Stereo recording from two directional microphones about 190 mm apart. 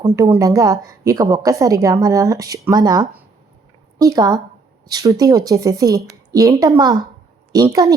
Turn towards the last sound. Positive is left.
turn(degrees=-20)  # may be behind; listen again after turning